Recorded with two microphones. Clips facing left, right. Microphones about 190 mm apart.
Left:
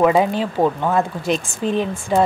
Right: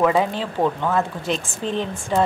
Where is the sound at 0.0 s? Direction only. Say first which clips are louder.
Left 3 dB; 15° left (ahead or behind).